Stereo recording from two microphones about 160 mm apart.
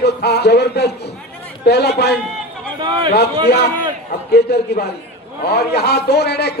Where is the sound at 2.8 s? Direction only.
25° right (ahead or behind).